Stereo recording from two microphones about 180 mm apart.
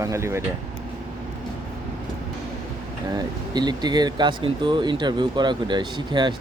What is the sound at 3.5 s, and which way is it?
Speech, 25° right (ahead or behind).